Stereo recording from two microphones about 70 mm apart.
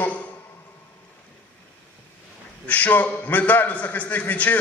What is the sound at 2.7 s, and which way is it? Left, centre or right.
A man's voice, left.